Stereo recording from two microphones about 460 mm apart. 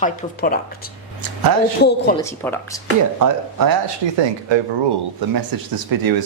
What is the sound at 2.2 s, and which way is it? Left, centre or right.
Speech, centre.